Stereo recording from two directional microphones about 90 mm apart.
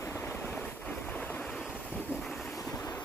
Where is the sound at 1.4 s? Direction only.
5° left (ahead or behind).